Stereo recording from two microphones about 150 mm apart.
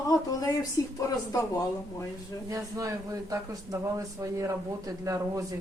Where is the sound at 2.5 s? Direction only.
20° right (ahead or behind).